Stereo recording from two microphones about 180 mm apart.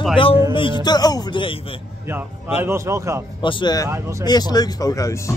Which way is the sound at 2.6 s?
15° right (ahead or behind).